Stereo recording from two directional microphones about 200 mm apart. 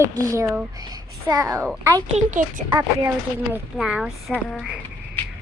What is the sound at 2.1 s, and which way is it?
Speech, 40° right (ahead or behind).